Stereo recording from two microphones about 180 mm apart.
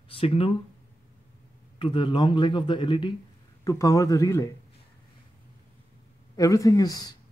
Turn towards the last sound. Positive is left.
turn(degrees=20)  # may be behind; listen again after turning